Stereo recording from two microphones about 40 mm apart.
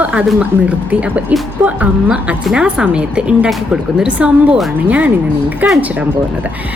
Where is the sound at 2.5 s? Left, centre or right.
Right.